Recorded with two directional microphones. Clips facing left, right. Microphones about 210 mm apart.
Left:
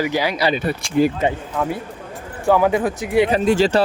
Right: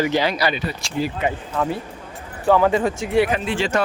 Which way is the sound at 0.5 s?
55° left (ahead or behind).